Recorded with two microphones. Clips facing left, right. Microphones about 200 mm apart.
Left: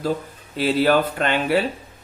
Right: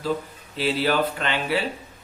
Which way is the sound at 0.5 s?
50° left (ahead or behind).